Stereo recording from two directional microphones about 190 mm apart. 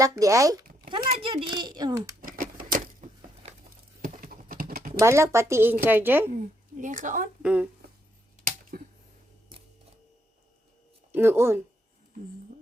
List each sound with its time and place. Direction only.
0.0 s a child's voice: 15° right (ahead or behind)
2.2 s a sound: 45° right (ahead or behind)
3.4 s a sound: 35° right (ahead or behind)
4.0 s clip-clop: 45° right (ahead or behind)
4.9 s speech: 15° right (ahead or behind)
6.3 s a woman's voice: 40° right (ahead or behind)
7.4 s speech: 5° right (ahead or behind)
8.7 s a sound: 50° right (ahead or behind)
11.1 s speech: 10° right (ahead or behind)